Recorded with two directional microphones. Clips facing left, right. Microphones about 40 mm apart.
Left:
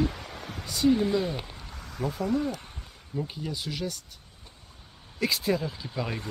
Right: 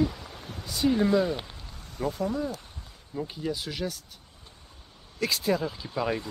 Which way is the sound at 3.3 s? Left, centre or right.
Centre.